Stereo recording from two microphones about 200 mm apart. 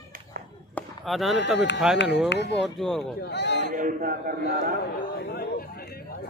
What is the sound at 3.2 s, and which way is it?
Speech, 60° left (ahead or behind).